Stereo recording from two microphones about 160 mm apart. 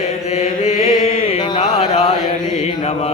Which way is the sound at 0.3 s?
45° left (ahead or behind).